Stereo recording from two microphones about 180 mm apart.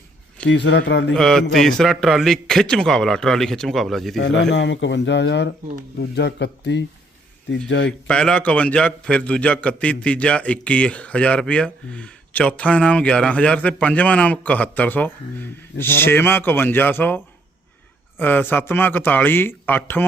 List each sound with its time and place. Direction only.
0.4 s speech: 75° left (ahead or behind)
1.1 s a man's voice: 5° left (ahead or behind)
4.2 s speech: 85° left
7.9 s a man's voice: 5° left (ahead or behind)